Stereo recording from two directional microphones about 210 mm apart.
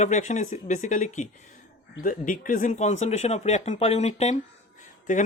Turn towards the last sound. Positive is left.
turn(degrees=35)  # may be behind; listen again after turning